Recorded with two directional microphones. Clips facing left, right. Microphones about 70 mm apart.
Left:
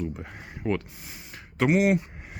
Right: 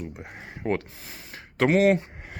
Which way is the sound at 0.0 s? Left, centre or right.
Centre.